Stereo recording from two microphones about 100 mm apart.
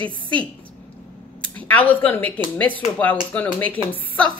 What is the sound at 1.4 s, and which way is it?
Speech, 15° left (ahead or behind).